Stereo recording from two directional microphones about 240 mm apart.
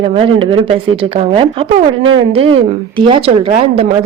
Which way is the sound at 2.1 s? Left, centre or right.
Right.